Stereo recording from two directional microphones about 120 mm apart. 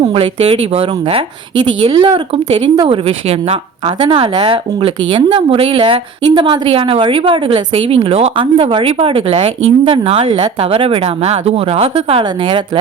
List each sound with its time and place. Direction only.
0.0 s speech: 50° right (ahead or behind)
12.2 s speech: 45° right (ahead or behind)